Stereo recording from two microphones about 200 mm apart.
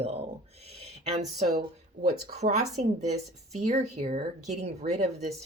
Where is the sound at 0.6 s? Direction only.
30° right (ahead or behind).